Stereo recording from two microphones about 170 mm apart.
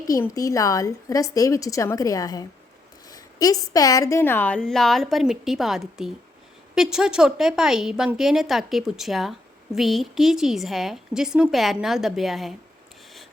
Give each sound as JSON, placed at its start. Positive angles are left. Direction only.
{"t": 0.3, "sound": "a woman's voice", "side_deg": 20}